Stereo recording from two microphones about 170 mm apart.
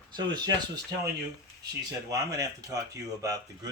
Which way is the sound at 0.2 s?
25° right (ahead or behind).